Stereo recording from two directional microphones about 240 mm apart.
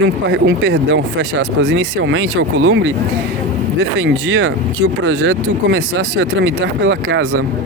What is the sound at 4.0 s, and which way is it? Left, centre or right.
Speech, right.